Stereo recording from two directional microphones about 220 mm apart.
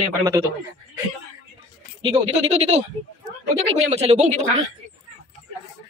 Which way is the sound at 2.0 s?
25° right (ahead or behind).